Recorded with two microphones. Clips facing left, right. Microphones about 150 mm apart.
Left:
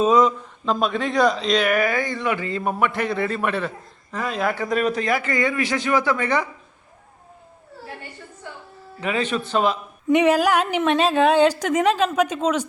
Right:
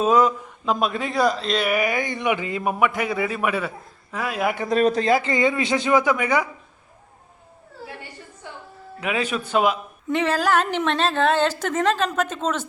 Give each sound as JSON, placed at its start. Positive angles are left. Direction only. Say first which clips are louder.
{"t": 0.0, "sound": "speech", "louder": "left 1 dB", "side_deg": -5}
{"t": 4.6, "sound": "speech", "louder": "right 6 dB", "side_deg": -35}
{"t": 9.0, "sound": "speech", "louder": "left 1 dB", "side_deg": -5}
{"t": 10.1, "sound": "speech", "louder": "left 4 dB", "side_deg": 15}